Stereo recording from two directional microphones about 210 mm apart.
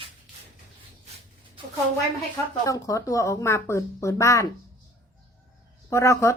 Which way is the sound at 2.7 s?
15° left (ahead or behind).